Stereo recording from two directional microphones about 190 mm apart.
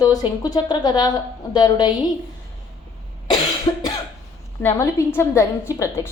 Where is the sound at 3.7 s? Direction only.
25° left (ahead or behind).